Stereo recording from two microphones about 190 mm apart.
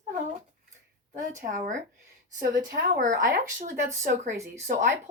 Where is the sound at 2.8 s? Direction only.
45° right (ahead or behind).